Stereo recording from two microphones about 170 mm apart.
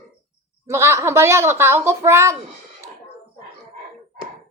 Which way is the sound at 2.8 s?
15° right (ahead or behind).